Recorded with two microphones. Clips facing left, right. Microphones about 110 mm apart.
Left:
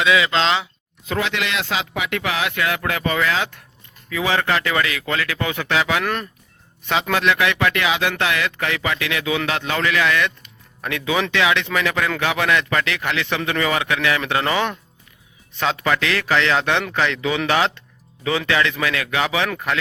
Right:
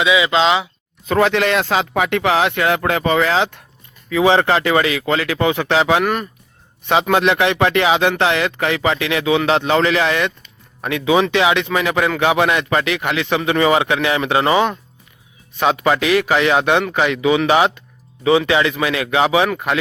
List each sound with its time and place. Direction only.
0.0 s a man's voice: 5° right (ahead or behind)
1.0 s speech: 45° right (ahead or behind)
2.0 s a man's voice: 30° right (ahead or behind)